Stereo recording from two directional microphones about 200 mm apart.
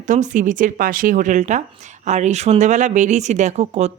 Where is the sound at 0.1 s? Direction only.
40° right (ahead or behind).